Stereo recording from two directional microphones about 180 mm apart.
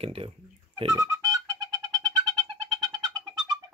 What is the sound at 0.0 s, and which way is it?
Speech, 30° right (ahead or behind).